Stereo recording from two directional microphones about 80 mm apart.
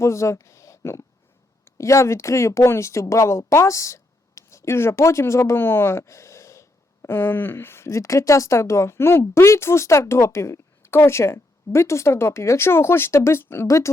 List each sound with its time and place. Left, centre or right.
0.0 s speech: left
13.7 s speech: left